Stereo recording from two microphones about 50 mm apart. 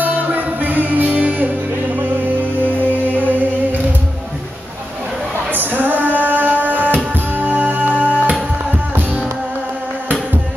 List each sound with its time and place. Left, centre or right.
0.3 s music: right
5.5 s music: right